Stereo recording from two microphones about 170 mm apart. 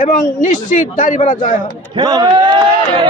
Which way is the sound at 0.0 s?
50° left (ahead or behind).